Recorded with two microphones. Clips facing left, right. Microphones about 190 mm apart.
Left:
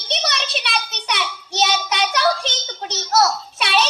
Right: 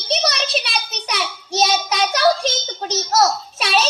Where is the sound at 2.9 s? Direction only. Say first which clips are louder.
Right 1 dB; 40° right (ahead or behind).